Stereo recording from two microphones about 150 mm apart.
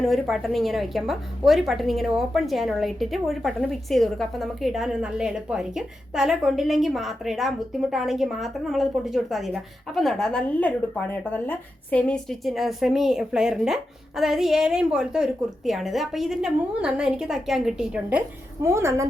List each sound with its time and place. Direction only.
0.0 s a woman's voice: centre (ahead or behind)
18.6 s a woman's voice: 15° right (ahead or behind)